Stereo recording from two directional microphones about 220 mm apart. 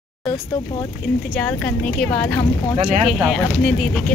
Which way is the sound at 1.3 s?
5° left (ahead or behind).